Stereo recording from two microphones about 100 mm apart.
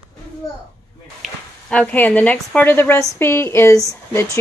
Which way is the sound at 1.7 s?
15° left (ahead or behind).